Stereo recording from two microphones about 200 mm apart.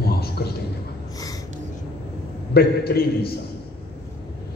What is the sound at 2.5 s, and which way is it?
Speech, 50° left (ahead or behind).